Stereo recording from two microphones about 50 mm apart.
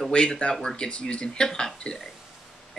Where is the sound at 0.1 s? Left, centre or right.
Left.